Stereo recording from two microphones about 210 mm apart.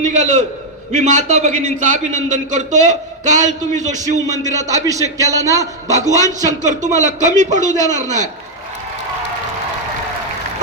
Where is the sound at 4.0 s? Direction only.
15° right (ahead or behind).